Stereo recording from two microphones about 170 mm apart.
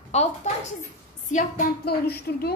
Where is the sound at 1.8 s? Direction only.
65° left (ahead or behind).